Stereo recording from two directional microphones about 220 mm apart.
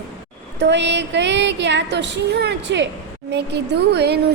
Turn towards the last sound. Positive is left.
turn(degrees=-50)  # may be behind; listen again after turning